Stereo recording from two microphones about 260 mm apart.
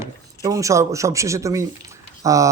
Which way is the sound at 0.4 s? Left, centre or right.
Centre.